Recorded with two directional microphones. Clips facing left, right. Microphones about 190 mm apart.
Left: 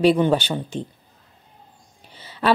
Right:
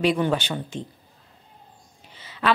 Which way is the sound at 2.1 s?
35° left (ahead or behind).